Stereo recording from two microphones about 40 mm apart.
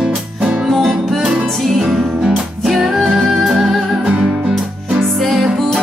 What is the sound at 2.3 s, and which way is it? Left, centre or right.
Music, centre.